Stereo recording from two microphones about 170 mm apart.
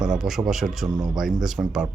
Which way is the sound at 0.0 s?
5° right (ahead or behind).